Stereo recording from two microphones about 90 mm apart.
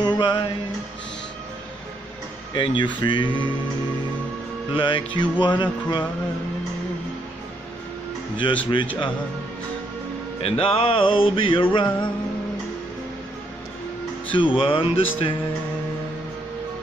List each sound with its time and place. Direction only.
0.0 s music: 55° left (ahead or behind)
2.5 s music: 65° left (ahead or behind)
4.7 s music: 65° left (ahead or behind)
8.4 s music: 65° left (ahead or behind)
10.4 s music: 90° left; by 12.1 s 65° left (ahead or behind)
14.3 s music: 70° left (ahead or behind)